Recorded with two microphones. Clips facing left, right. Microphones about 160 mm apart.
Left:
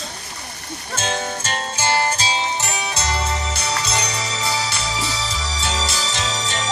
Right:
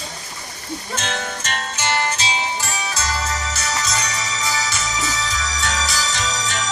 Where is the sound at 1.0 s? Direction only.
35° left (ahead or behind).